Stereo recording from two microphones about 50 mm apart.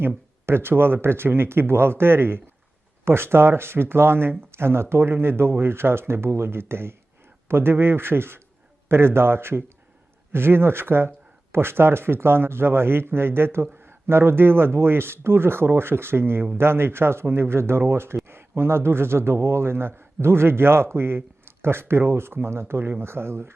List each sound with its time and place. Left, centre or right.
0.4 s speech: right